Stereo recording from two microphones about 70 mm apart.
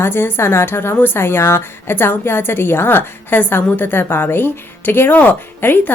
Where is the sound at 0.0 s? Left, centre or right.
Left.